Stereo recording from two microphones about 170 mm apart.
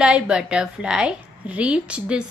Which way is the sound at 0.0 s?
5° right (ahead or behind).